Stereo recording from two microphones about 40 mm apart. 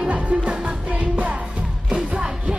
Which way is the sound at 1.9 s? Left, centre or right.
Right.